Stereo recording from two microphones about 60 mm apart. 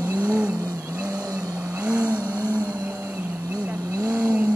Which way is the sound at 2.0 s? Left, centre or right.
Right.